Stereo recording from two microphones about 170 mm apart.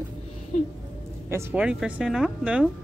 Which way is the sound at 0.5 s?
50° left (ahead or behind).